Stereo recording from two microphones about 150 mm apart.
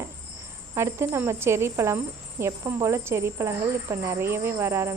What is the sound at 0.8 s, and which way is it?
A woman's voice, 15° right (ahead or behind).